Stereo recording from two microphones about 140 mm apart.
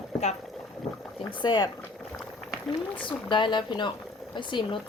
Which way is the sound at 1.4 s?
35° left (ahead or behind).